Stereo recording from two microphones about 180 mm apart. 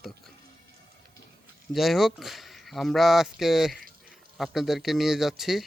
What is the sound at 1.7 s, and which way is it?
Speech, centre (ahead or behind).